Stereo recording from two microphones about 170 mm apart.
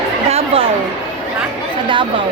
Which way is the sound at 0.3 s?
35° right (ahead or behind).